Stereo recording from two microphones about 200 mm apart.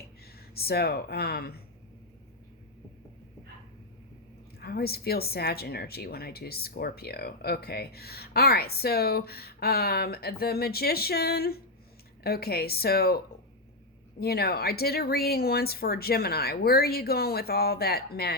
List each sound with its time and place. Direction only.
0.5 s speech: 50° left (ahead or behind)
4.6 s speech: 50° left (ahead or behind)